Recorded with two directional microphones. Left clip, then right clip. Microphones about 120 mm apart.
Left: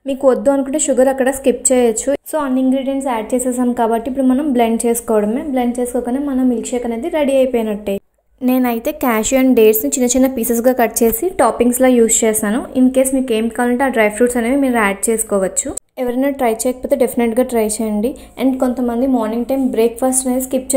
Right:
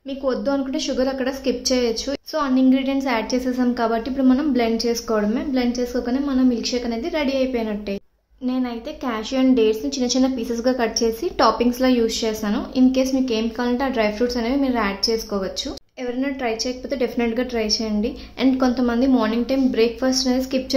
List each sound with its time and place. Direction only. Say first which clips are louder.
0.2 s a woman's voice: left 9 dB; 50° left (ahead or behind)
2.5 s a woman's voice: even; 15° left (ahead or behind)
4.2 s a woman's voice: left 1 dB; 20° left (ahead or behind)
4.6 s a woman's voice: left 6 dB; 40° left (ahead or behind)
5.3 s a woman's voice: left 5 dB; 25° left (ahead or behind)
8.5 s a woman's voice: left 10 dB; 55° left (ahead or behind)
9.3 s a woman's voice: left 6 dB; 40° left (ahead or behind)
11.3 s a woman's voice: left 1 dB; 25° left (ahead or behind)
11.8 s a woman's voice: left 10 dB; 40° left (ahead or behind)
18.9 s a woman's voice: left 3 dB; 10° left (ahead or behind)